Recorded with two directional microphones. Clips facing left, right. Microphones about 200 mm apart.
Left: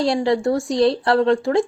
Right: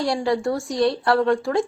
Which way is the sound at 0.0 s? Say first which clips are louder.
Left 3 dB; 25° left (ahead or behind).